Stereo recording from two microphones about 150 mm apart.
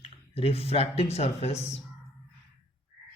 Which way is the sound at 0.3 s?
40° left (ahead or behind).